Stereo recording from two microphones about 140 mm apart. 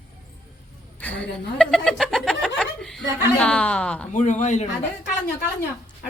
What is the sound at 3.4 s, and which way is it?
Child singing, 5° left (ahead or behind).